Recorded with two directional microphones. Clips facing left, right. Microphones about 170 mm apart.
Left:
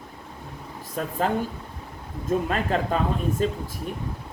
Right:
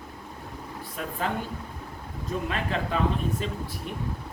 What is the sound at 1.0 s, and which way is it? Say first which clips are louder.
Speech: left 5 dB; 40° left (ahead or behind).